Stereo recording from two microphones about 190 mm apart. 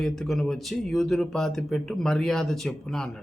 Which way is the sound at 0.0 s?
Centre (ahead or behind).